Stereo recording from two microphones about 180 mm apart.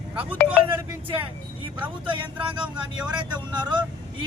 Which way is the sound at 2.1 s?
25° right (ahead or behind).